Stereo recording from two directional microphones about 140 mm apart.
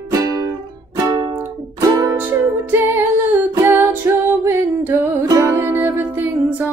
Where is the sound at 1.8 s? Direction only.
25° right (ahead or behind).